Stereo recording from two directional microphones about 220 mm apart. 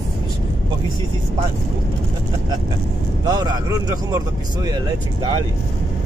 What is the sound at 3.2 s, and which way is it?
Speech, 20° right (ahead or behind).